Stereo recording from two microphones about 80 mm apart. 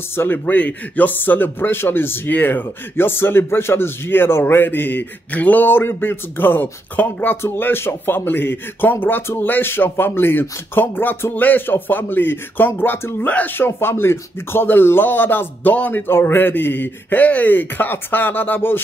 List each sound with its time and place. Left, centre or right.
0.1 s speech: left